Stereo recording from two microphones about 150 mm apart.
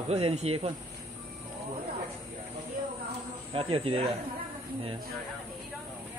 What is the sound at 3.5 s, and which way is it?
Speech, 40° right (ahead or behind).